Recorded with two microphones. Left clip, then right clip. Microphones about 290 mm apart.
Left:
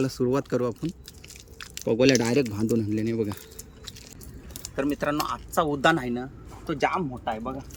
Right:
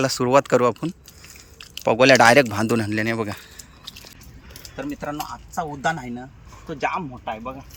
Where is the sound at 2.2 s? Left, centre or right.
Right.